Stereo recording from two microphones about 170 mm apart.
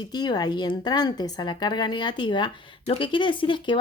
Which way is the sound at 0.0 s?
25° left (ahead or behind).